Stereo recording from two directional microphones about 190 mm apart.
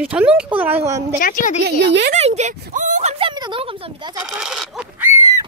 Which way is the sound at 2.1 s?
35° right (ahead or behind).